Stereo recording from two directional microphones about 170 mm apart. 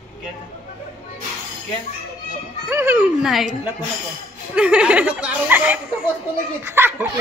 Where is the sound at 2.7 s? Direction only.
15° right (ahead or behind).